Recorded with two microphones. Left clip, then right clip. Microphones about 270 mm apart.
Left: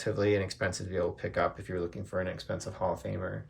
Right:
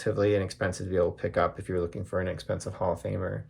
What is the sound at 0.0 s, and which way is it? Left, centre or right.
Speech, centre.